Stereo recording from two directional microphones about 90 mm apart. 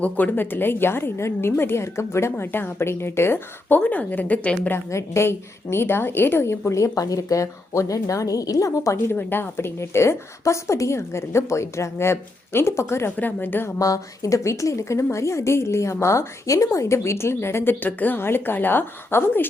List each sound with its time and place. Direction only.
0.0 s a woman's voice: 20° left (ahead or behind)
4.7 s a woman's voice: 30° left (ahead or behind)
9.1 s a woman's voice: 25° left (ahead or behind)
13.7 s a woman's voice: 40° left (ahead or behind); by 19.5 s 20° left (ahead or behind)